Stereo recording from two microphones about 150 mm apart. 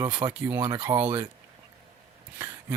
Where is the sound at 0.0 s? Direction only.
30° right (ahead or behind).